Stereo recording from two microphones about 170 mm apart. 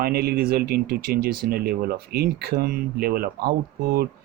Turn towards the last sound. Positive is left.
turn(degrees=-65)  # may be behind; listen again after turning